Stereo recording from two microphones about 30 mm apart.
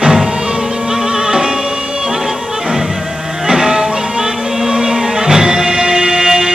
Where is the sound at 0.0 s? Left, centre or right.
Right.